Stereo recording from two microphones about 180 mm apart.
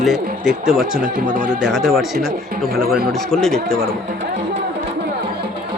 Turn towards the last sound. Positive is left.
turn(degrees=0)  # may be behind; listen again after turning